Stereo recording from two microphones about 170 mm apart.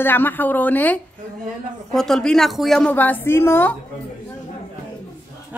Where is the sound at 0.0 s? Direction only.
10° left (ahead or behind).